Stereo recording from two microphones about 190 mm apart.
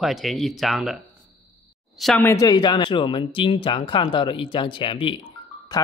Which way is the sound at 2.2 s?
20° left (ahead or behind).